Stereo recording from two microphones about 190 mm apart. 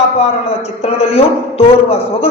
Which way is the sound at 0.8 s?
35° left (ahead or behind).